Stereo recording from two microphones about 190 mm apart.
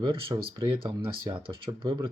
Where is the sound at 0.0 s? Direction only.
25° right (ahead or behind).